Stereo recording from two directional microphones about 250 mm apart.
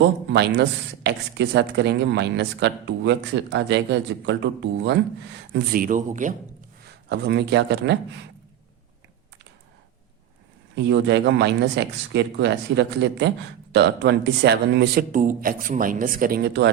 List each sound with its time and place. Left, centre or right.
0.3 s speech: right
5.5 s a man's voice: right
6.8 s speech: right
10.8 s a man's voice: right